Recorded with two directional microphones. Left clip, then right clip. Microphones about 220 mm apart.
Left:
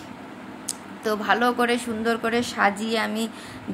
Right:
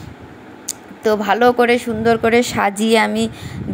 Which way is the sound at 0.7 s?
25° right (ahead or behind).